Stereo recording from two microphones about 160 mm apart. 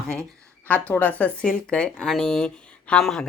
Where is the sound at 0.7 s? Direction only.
10° left (ahead or behind).